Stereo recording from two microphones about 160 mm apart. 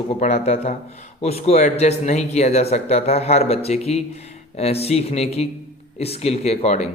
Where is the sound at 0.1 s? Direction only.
40° left (ahead or behind).